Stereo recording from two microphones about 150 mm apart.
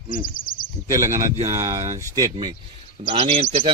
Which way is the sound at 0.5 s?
70° left (ahead or behind).